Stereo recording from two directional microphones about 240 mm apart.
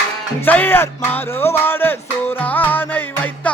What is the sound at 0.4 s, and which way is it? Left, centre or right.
Music, centre.